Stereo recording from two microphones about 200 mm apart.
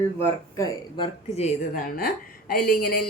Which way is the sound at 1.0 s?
30° left (ahead or behind).